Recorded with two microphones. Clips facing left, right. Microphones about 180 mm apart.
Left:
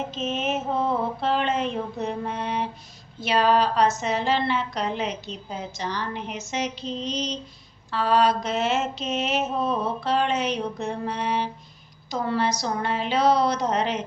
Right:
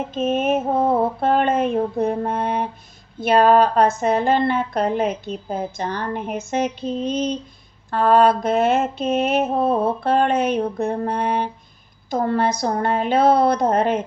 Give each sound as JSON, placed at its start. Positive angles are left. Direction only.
{"t": 0.1, "sound": "mantra", "side_deg": -50}
{"t": 3.2, "sound": "speech", "side_deg": -55}
{"t": 7.9, "sound": "a sound", "side_deg": -55}
{"t": 12.1, "sound": "speech", "side_deg": -50}